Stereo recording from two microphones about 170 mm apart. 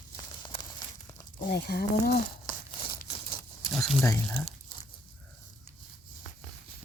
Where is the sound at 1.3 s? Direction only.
60° left (ahead or behind).